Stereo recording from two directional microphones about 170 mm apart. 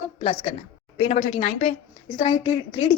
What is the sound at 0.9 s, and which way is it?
A woman's voice, 40° left (ahead or behind).